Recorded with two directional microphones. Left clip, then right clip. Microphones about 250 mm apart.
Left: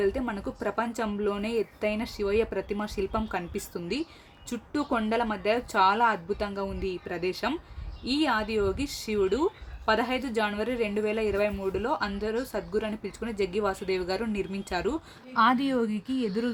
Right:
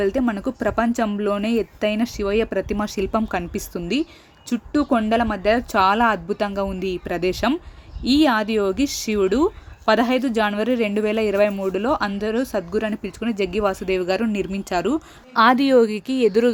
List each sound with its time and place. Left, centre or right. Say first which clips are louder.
0.0 s speech: right 7 dB; right